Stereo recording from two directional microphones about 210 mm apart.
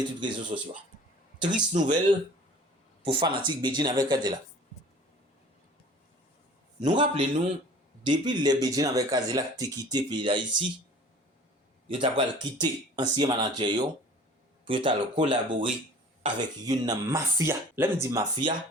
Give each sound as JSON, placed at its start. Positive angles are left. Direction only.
{"t": 0.5, "sound": "speech", "side_deg": -30}
{"t": 6.8, "sound": "speech", "side_deg": -20}
{"t": 11.9, "sound": "speech", "side_deg": -25}